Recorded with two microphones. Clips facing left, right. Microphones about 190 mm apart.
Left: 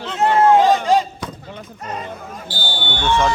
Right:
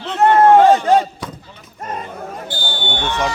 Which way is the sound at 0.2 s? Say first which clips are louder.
Right 3 dB; 60° right (ahead or behind).